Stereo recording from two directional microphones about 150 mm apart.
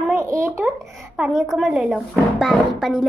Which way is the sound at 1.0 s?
5° right (ahead or behind).